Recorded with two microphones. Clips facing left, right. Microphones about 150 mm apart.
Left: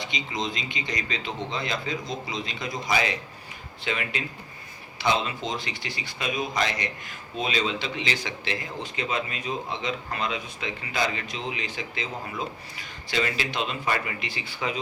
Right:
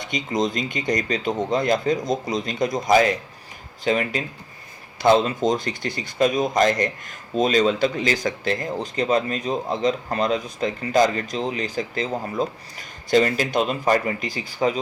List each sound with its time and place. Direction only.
0.0 s speech: 45° right (ahead or behind)